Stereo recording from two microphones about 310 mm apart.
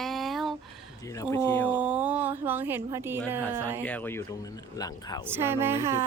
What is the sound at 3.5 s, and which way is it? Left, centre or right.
Speech, centre.